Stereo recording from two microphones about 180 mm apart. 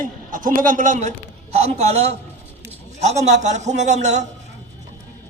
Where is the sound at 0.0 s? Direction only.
50° right (ahead or behind).